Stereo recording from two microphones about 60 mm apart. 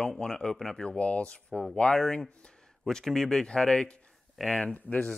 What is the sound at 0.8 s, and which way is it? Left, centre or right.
Speech, left.